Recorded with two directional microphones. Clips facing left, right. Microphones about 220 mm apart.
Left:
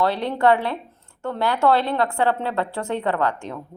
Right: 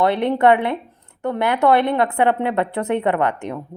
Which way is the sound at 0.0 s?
20° right (ahead or behind).